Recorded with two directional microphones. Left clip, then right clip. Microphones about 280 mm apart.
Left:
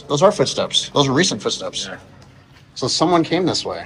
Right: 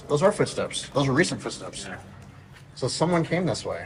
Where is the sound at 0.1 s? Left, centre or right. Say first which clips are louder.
Left 7 dB; centre.